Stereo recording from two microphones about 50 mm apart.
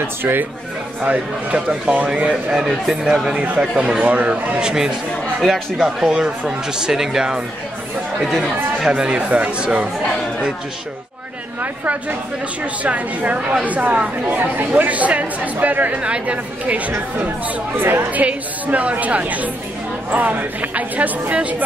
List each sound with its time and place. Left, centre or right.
0.0 s speech: right
1.0 s speech: right
4.6 s speech: centre
5.4 s speech: centre
5.9 s speech: centre
8.8 s speech: centre
11.6 s a woman's voice: right
17.7 s speech: right
18.2 s speech: right